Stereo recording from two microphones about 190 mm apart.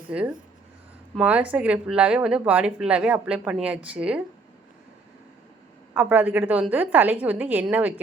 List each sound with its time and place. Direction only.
0.1 s speech: 5° right (ahead or behind)
5.9 s speech: 10° right (ahead or behind)